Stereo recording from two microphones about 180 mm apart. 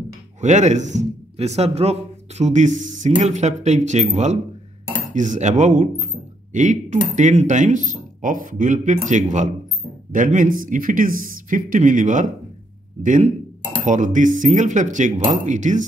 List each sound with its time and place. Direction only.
0.4 s speech: 40° right (ahead or behind)